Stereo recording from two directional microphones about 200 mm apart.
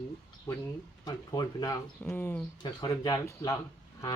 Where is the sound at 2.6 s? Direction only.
20° left (ahead or behind).